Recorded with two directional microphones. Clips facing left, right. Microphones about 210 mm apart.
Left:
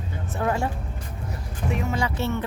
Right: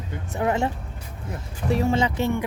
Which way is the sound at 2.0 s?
15° right (ahead or behind).